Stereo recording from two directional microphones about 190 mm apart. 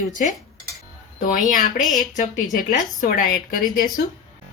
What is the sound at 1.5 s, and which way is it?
A woman's voice, 45° left (ahead or behind).